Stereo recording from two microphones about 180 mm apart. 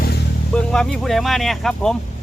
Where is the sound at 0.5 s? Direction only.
5° left (ahead or behind).